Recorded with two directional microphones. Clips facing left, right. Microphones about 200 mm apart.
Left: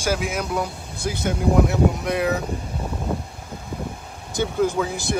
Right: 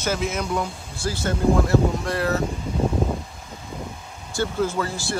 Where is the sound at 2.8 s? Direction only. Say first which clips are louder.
Right 7 dB; 25° right (ahead or behind).